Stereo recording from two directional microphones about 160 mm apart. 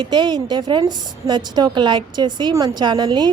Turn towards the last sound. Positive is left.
turn(degrees=-25)  # may be behind; listen again after turning